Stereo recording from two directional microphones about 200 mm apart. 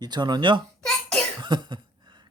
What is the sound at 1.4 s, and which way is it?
Cough, 25° right (ahead or behind).